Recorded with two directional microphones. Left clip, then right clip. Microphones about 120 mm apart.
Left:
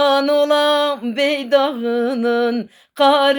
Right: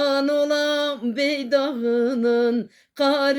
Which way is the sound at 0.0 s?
40° right (ahead or behind).